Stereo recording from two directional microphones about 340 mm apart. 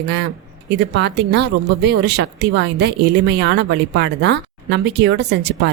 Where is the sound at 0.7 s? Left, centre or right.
Right.